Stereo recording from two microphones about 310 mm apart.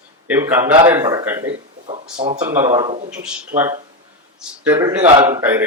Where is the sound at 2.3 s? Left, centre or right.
Centre.